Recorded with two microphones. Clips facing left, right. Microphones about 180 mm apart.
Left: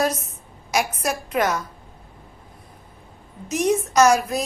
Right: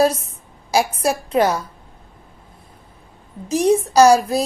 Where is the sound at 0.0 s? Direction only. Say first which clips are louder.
Right 6 dB; 30° right (ahead or behind).